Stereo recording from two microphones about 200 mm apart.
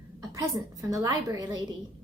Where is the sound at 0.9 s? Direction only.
15° right (ahead or behind).